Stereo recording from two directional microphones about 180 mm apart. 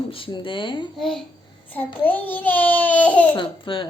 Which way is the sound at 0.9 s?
Centre (ahead or behind).